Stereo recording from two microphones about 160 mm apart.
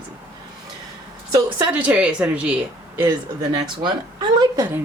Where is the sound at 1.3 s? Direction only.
15° right (ahead or behind).